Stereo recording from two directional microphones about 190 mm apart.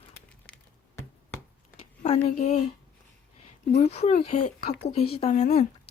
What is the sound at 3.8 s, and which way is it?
Speech, 35° left (ahead or behind).